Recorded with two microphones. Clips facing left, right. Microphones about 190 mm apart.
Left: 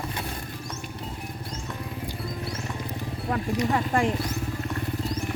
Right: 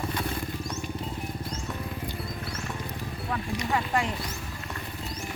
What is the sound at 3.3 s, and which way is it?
Speech, 45° left (ahead or behind).